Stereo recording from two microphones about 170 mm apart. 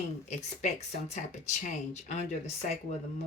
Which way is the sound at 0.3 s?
45° left (ahead or behind).